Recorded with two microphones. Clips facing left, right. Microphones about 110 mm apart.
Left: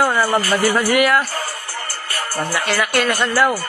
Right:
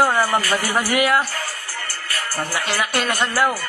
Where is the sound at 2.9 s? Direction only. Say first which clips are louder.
Left 3 dB; 20° right (ahead or behind).